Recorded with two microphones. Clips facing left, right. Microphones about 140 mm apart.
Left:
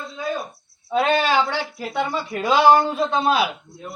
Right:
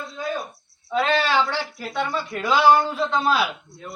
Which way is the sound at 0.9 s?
15° left (ahead or behind).